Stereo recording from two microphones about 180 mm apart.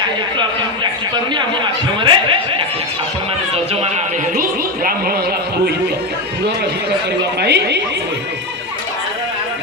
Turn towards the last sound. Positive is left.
turn(degrees=-70)  # may be behind; listen again after turning